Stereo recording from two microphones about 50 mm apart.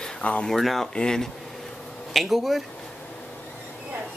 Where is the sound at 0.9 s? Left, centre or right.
Centre.